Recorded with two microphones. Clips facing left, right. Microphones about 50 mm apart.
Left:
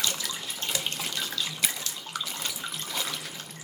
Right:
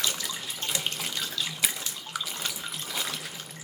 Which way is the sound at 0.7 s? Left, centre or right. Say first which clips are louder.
Right 1 dB; centre.